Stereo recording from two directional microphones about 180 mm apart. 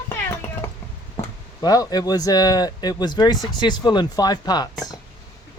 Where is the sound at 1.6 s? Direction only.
20° left (ahead or behind).